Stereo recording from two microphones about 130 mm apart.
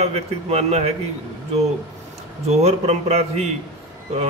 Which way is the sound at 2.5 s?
55° right (ahead or behind).